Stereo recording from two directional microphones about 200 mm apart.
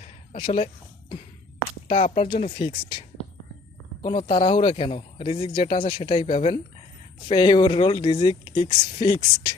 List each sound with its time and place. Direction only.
0.3 s speech: 25° left (ahead or behind)
1.9 s speech: 30° left (ahead or behind)
4.0 s speech: 25° left (ahead or behind)